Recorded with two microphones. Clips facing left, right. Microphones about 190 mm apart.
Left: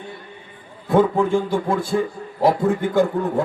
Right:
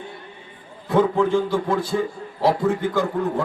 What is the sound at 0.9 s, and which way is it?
A man's voice, 45° left (ahead or behind).